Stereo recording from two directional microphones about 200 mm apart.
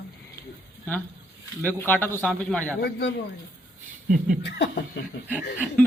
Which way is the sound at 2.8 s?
55° left (ahead or behind).